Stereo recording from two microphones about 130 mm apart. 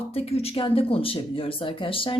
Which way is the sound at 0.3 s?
50° left (ahead or behind).